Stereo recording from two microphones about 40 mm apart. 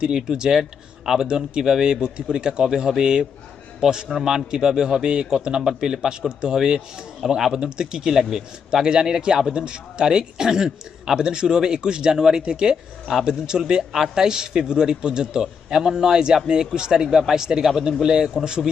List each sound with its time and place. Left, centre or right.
0.0 s a man's voice: centre